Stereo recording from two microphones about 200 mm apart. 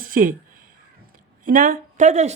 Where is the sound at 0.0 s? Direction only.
45° right (ahead or behind).